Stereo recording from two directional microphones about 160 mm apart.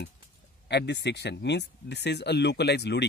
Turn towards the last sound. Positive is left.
turn(degrees=90)